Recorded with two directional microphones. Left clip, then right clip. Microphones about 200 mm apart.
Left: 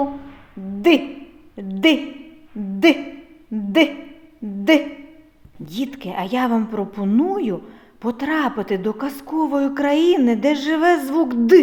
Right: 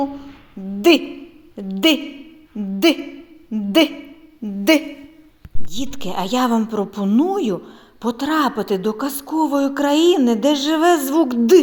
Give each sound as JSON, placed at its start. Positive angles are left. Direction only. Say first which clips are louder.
{"t": 0.8, "sound": "a woman's voice", "louder": "right 2 dB", "side_deg": -25}
{"t": 2.7, "sound": "hoot", "louder": "left 1 dB", "side_deg": -25}
{"t": 3.5, "sound": "a woman's voice", "louder": "right 1 dB", "side_deg": -25}